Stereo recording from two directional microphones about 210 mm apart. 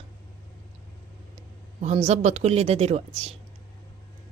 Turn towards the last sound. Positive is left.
turn(degrees=-30)  # may be behind; listen again after turning